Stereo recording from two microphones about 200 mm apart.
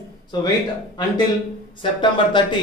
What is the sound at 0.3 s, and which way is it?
Speech, 20° left (ahead or behind).